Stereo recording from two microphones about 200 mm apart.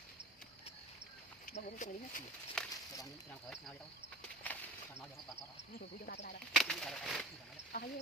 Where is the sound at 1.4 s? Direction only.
35° left (ahead or behind).